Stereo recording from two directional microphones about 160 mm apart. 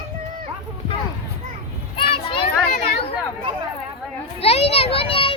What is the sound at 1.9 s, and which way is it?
Children playing, 35° left (ahead or behind).